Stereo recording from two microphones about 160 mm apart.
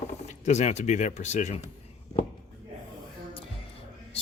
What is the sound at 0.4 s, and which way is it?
Speech, 45° left (ahead or behind).